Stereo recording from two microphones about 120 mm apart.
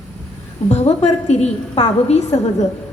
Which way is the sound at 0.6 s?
65° left (ahead or behind).